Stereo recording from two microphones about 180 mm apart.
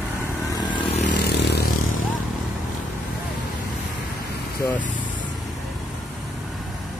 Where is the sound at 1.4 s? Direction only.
65° left (ahead or behind).